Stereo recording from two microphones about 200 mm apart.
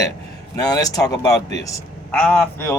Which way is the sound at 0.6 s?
20° left (ahead or behind).